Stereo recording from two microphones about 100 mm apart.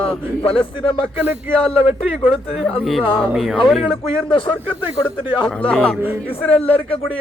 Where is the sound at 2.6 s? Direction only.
Centre (ahead or behind).